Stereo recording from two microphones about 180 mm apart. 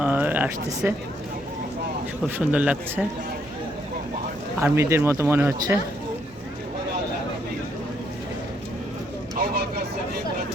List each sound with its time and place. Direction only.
0.0 s a sound: 10° right (ahead or behind)
2.2 s speech: 5° right (ahead or behind)
4.6 s speech: 15° right (ahead or behind)
9.4 s vehicle: 60° right (ahead or behind)